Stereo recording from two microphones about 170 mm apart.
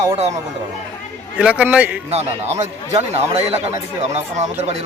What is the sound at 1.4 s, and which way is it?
Speech, 5° right (ahead or behind).